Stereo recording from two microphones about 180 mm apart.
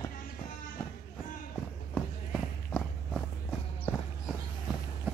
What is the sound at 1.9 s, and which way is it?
Walk, 5° left (ahead or behind).